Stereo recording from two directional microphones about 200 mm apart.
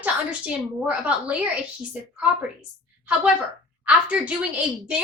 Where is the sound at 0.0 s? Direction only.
5° right (ahead or behind).